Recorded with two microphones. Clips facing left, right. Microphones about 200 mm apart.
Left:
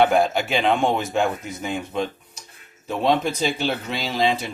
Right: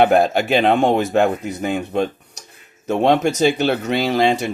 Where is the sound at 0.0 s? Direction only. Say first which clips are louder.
Right 4 dB; 60° right (ahead or behind).